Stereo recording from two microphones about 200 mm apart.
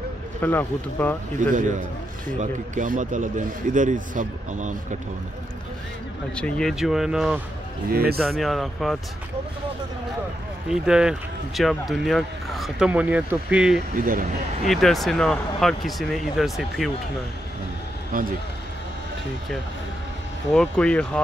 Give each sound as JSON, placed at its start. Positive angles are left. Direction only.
{"t": 0.4, "sound": "speech", "side_deg": 10}
{"t": 1.4, "sound": "a man's voice", "side_deg": -40}
{"t": 6.3, "sound": "speech", "side_deg": 5}
{"t": 7.9, "sound": "speech", "side_deg": -50}
{"t": 8.2, "sound": "speech", "side_deg": 0}
{"t": 10.7, "sound": "speech", "side_deg": -5}
{"t": 13.7, "sound": "speech", "side_deg": -45}
{"t": 14.6, "sound": "speech", "side_deg": 0}
{"t": 18.1, "sound": "speech", "side_deg": -45}
{"t": 20.5, "sound": "speech", "side_deg": 5}